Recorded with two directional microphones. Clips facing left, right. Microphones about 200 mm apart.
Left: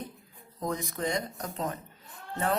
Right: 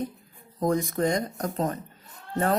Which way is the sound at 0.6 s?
50° right (ahead or behind).